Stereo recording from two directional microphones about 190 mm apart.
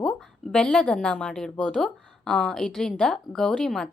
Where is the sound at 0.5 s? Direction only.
5° left (ahead or behind).